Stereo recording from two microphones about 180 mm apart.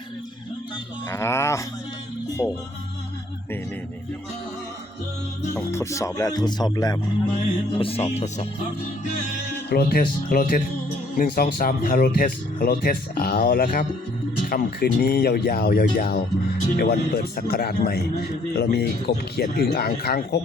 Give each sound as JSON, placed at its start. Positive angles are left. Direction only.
{"t": 1.1, "sound": "speech", "side_deg": 15}
{"t": 2.4, "sound": "speech", "side_deg": 0}
{"t": 5.5, "sound": "music", "side_deg": 15}
{"t": 7.8, "sound": "music", "side_deg": 30}
{"t": 9.6, "sound": "speech", "side_deg": 60}